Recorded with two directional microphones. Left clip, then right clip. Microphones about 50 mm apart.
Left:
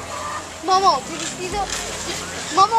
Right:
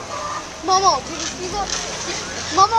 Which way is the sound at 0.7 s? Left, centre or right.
Left.